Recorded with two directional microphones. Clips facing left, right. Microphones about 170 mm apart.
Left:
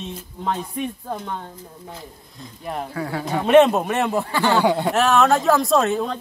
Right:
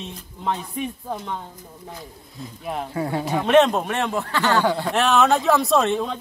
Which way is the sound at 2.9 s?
20° right (ahead or behind).